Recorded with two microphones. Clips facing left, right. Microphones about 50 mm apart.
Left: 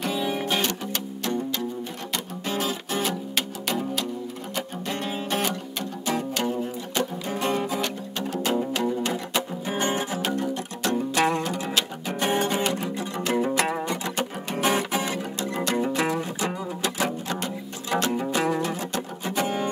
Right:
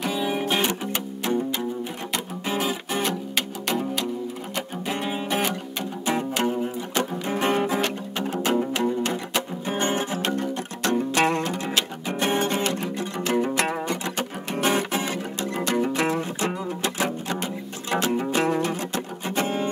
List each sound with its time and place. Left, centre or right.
0.0 s music: centre
6.0 s music: centre; by 8.4 s right
8.5 s music: centre
9.8 s music: right
11.1 s music: centre